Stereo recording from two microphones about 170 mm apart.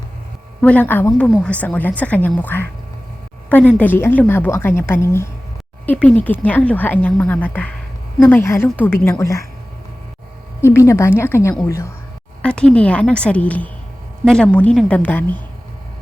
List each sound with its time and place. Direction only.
0.6 s speech: 10° left (ahead or behind)
10.6 s speech: 15° left (ahead or behind)